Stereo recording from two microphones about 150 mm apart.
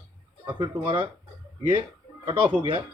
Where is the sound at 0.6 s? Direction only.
35° right (ahead or behind).